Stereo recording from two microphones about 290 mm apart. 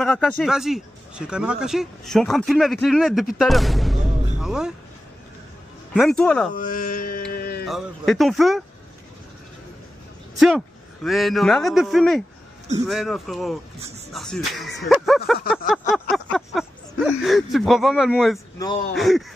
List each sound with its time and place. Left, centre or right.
0.0 s speech: centre
5.9 s speech: centre
6.5 s speech: left
7.3 s a sound: left
7.6 s speech: centre
11.1 s speech: centre
15.9 s a sound: centre
17.0 s speech: centre
18.6 s speech: centre
18.9 s speech: centre